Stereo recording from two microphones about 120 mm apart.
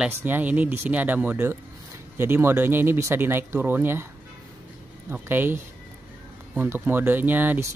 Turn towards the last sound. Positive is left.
turn(degrees=-15)  # may be behind; listen again after turning